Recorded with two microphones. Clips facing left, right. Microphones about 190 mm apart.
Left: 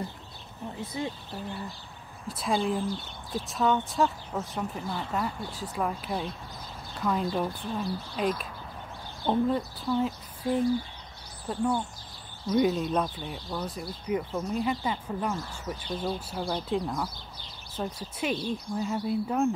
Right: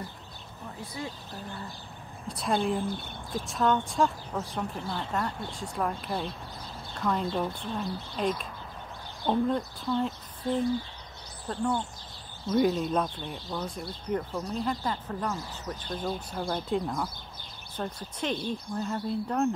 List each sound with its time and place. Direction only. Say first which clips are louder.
0.7 s speech: left 4 dB; 20° left (ahead or behind)
2.2 s speech: even; centre (ahead or behind)
2.9 s speech: even; 55° right (ahead or behind)
3.4 s speech: even; centre (ahead or behind)
9.5 s speech: left 1 dB; 5° left (ahead or behind)